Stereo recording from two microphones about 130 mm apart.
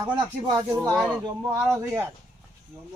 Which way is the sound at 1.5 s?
20° right (ahead or behind).